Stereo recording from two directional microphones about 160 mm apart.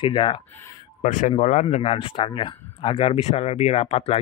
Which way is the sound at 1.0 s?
50° left (ahead or behind).